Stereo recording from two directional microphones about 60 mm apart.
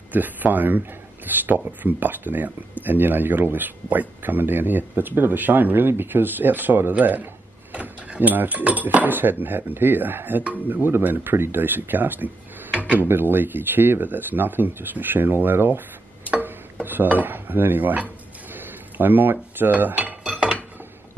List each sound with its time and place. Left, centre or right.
0.1 s speech: right
12.7 s drawer open or close: centre
13.0 s speech: right
16.3 s tick-tock: right
16.8 s speech: right
18.5 s a sound: right
19.6 s cutlery: right
20.2 s dishes: centre